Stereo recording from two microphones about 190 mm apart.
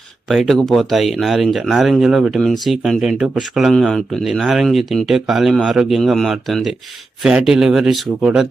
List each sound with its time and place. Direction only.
0.3 s speech: centre (ahead or behind)